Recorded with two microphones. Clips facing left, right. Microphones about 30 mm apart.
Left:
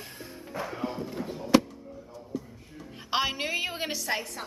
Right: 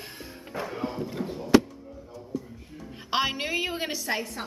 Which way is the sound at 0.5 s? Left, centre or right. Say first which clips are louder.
Right 1 dB; right.